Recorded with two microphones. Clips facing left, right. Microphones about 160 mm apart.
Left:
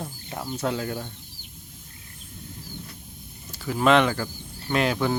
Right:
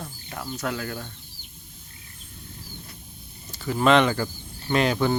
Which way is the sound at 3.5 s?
5° left (ahead or behind).